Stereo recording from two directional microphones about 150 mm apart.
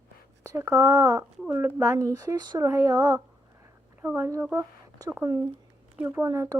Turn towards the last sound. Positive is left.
turn(degrees=-20)  # may be behind; listen again after turning